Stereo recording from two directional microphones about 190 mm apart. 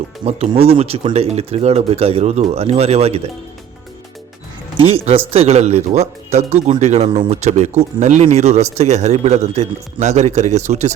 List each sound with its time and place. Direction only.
0.3 s speech: 30° right (ahead or behind)
4.8 s speech: 30° right (ahead or behind)